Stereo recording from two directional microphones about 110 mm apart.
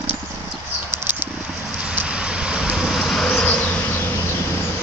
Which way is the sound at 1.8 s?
10° right (ahead or behind).